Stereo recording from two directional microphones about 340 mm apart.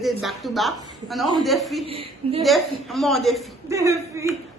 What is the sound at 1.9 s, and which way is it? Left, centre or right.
Speech, centre.